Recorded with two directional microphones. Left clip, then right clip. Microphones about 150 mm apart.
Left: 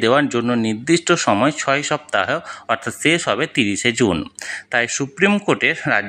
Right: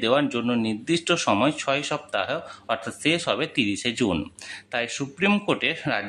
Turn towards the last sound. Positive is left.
turn(degrees=30)  # may be behind; listen again after turning